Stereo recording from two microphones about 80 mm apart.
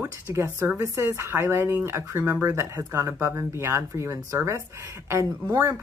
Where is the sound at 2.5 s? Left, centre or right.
Right.